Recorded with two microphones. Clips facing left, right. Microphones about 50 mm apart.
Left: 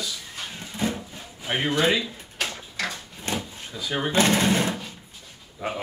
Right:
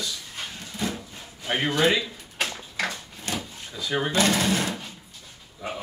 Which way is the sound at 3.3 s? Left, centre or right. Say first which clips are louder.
Left 2 dB; left.